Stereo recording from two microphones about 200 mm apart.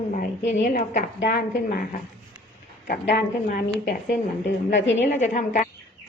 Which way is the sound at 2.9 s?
45° left (ahead or behind).